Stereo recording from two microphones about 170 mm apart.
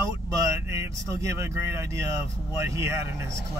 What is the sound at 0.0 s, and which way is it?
Speech, 15° right (ahead or behind).